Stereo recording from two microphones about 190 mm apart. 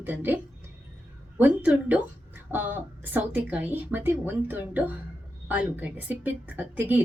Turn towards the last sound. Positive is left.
turn(degrees=-10)  # may be behind; listen again after turning